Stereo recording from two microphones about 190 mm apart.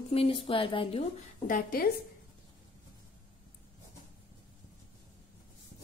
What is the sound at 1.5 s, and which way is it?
Speech, 50° left (ahead or behind).